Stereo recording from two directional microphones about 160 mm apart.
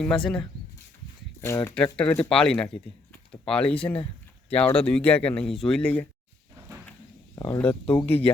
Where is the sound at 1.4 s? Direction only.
20° left (ahead or behind).